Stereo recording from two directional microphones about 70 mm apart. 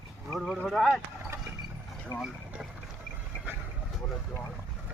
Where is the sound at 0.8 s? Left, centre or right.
Centre.